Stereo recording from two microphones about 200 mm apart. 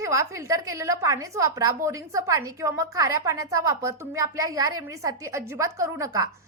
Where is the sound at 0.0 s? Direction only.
15° right (ahead or behind).